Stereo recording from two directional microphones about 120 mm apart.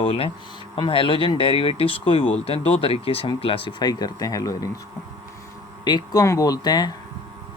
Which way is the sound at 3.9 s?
35° left (ahead or behind).